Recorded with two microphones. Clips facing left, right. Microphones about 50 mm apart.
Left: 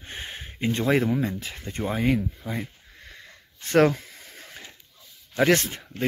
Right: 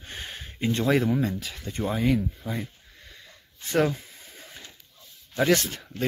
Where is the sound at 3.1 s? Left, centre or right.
Left.